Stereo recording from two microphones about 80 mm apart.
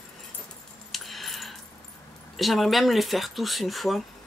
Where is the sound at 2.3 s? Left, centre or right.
Centre.